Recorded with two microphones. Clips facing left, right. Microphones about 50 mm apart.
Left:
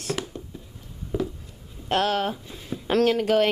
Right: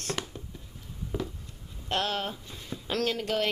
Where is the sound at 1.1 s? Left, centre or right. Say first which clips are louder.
Left 7 dB; centre.